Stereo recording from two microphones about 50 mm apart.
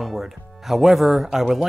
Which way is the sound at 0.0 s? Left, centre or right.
Centre.